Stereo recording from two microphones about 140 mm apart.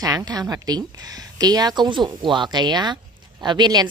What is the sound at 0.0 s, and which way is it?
A woman's voice, 25° right (ahead or behind).